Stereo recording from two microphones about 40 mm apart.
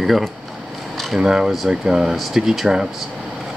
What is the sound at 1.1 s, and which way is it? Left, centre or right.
Speech, centre.